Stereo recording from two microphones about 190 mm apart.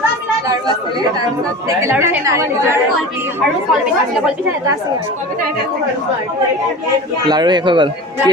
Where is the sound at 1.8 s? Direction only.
10° right (ahead or behind).